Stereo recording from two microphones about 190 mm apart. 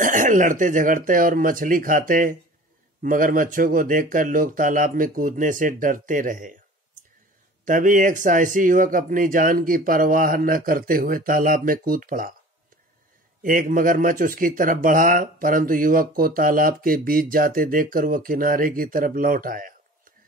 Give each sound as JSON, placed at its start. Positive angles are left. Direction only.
{"t": 0.0, "sound": "speech", "side_deg": -45}
{"t": 7.6, "sound": "speech", "side_deg": -45}
{"t": 13.4, "sound": "speech", "side_deg": -45}